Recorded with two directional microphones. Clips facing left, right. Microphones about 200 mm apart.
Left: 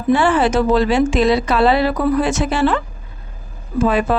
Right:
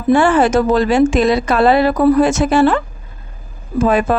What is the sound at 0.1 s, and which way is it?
A woman's voice, 45° right (ahead or behind).